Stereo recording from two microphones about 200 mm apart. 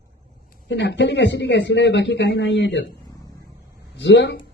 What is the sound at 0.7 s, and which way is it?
A man's voice, 60° left (ahead or behind).